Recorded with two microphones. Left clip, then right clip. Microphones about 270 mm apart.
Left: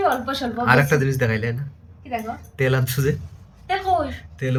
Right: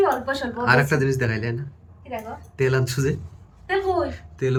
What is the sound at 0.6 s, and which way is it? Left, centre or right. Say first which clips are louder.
Speech: left 2 dB; centre.